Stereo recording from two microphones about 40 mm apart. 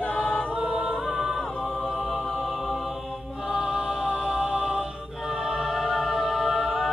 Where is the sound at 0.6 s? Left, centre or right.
Centre.